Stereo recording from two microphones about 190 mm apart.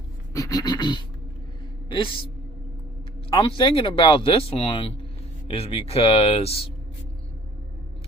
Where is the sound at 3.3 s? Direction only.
30° left (ahead or behind).